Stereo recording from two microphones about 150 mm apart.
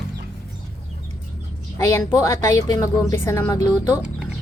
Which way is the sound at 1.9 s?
20° left (ahead or behind).